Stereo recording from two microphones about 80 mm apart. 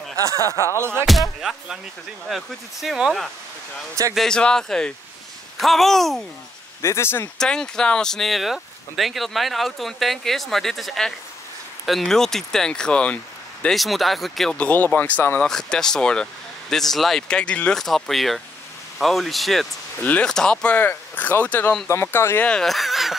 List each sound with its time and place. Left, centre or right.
0.4 s speech: left
0.7 s speech: right
2.2 s speech: centre
6.8 s speech: left
7.3 s speech: centre
13.7 s speech: centre
14.6 s speech: centre
15.4 s speech: centre
20.0 s speech: left
20.2 s speech: centre; by 22.4 s left
22.4 s speech: centre